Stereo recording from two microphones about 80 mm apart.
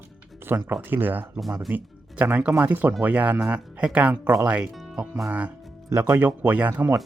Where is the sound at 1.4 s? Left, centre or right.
Centre.